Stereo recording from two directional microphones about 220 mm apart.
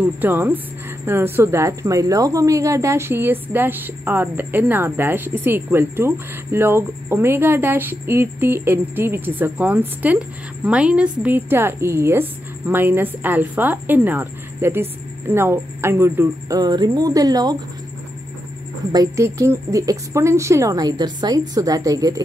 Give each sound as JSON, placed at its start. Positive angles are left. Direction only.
{"t": 0.0, "sound": "a woman's voice", "side_deg": -10}
{"t": 18.9, "sound": "a woman's voice", "side_deg": -15}